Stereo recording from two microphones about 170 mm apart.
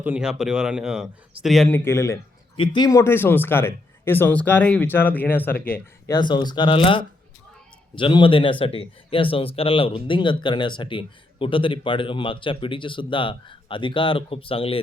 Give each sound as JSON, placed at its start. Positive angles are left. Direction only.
{"t": 0.0, "sound": "speech", "side_deg": -5}
{"t": 1.7, "sound": "speech", "side_deg": 15}
{"t": 5.7, "sound": "a man's voice", "side_deg": 25}